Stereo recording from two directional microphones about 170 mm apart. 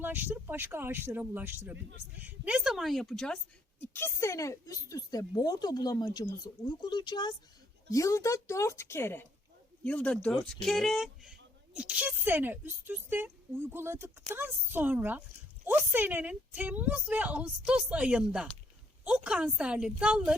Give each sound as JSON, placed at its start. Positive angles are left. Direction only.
{"t": 0.0, "sound": "a woman's voice", "side_deg": -10}